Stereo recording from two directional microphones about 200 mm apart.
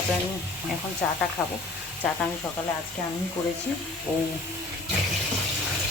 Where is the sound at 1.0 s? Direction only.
5° left (ahead or behind).